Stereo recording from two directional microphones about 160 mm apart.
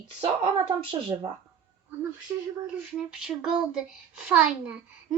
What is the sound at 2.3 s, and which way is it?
A child's voice, 15° right (ahead or behind).